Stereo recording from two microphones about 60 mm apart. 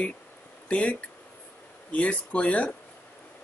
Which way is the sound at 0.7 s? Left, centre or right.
Left.